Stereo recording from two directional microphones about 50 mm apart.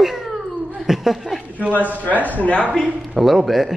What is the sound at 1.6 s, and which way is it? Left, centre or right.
Speech, right.